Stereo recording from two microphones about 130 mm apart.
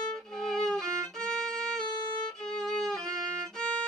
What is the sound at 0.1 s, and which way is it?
Violin, 5° left (ahead or behind).